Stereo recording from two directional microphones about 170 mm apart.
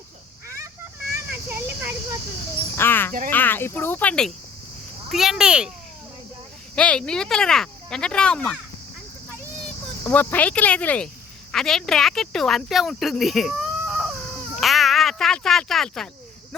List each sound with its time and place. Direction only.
0.4 s a sound: 15° right (ahead or behind)
2.7 s cricket: 15° left (ahead or behind)
3.2 s speech: 10° left (ahead or behind); by 5.7 s 5° right (ahead or behind)
6.7 s speech: 5° left (ahead or behind)
10.0 s speech: 10° left (ahead or behind)